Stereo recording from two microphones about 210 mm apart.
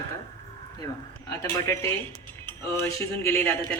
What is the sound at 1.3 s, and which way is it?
A woman's voice, 10° left (ahead or behind).